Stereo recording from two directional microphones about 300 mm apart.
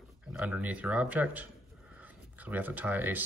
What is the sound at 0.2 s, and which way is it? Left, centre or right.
Speech, centre.